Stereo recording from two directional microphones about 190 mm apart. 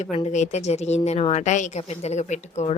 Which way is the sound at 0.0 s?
35° left (ahead or behind).